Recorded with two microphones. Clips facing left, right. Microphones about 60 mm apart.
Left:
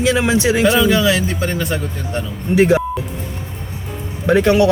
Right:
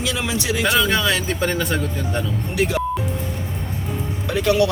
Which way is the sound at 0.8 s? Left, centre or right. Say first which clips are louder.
Left 5 dB; centre.